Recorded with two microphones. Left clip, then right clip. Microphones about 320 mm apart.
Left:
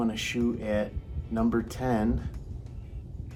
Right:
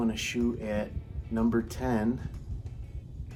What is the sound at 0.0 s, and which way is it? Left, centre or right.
Speech, centre.